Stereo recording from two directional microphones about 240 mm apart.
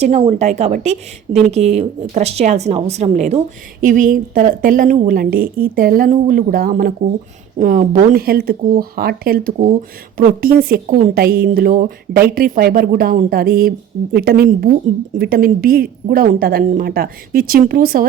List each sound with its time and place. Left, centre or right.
0.0 s a woman's voice: right